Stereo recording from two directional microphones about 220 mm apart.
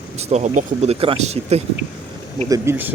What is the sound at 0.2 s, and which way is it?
Speech, 30° right (ahead or behind).